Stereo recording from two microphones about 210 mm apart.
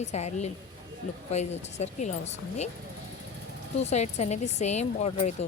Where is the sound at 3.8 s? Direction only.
30° left (ahead or behind).